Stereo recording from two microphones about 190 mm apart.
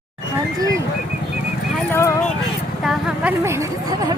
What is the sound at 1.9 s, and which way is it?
Clip-clop, 15° left (ahead or behind).